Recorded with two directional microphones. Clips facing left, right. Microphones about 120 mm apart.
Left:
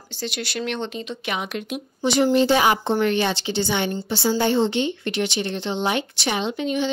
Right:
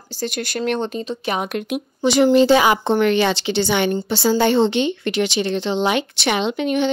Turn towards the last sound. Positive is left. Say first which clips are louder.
# right 4 dB
turn(degrees=-65)  # may be behind; listen again after turning